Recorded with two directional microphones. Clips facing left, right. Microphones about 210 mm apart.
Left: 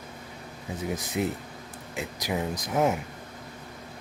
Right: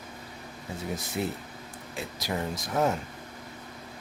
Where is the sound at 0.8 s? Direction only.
20° left (ahead or behind).